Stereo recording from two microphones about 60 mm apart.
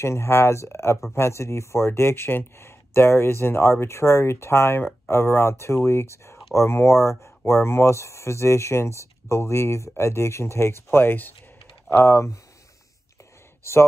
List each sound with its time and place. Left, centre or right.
0.0 s speech: left
11.9 s speech: left